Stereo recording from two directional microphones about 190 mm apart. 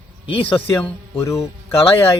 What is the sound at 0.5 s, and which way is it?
Speech, 10° left (ahead or behind).